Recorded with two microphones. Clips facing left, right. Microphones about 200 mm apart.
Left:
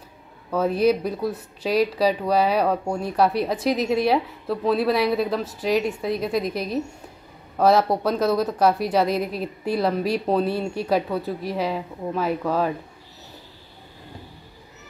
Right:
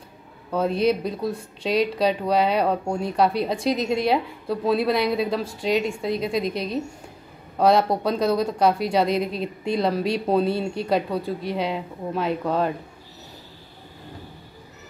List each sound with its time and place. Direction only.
0.6 s a woman's voice: 5° left (ahead or behind)